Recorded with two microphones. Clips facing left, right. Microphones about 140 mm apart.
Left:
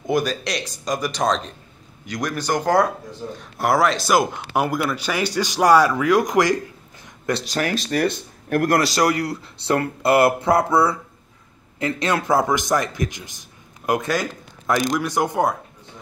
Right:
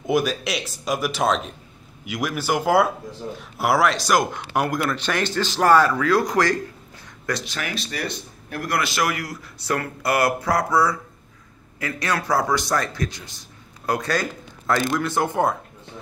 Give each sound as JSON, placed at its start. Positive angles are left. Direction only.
{"t": 0.0, "sound": "speech", "side_deg": 0}
{"t": 7.4, "sound": "speech", "side_deg": 40}
{"t": 8.7, "sound": "speech", "side_deg": 35}